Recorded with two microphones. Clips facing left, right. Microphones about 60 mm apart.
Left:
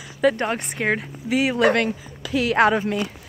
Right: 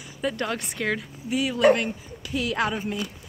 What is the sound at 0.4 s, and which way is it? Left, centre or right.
Speech, left.